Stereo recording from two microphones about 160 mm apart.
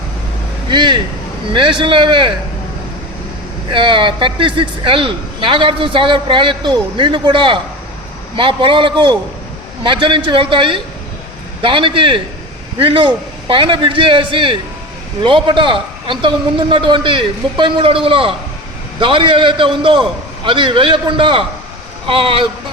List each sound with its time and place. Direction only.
0.7 s a man's voice: 30° right (ahead or behind)
3.7 s a man's voice: 30° right (ahead or behind)